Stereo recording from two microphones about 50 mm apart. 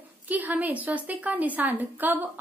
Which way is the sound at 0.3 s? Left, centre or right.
Right.